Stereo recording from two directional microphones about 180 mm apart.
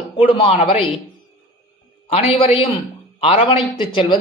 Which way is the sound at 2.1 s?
35° left (ahead or behind).